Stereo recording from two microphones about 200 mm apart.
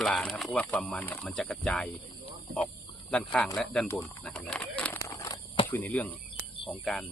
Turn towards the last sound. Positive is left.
turn(degrees=5)  # may be behind; listen again after turning